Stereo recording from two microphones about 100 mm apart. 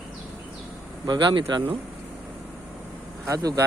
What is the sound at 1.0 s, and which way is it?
Speech, 50° right (ahead or behind).